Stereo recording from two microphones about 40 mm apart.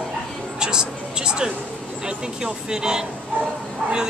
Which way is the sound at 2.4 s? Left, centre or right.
Centre.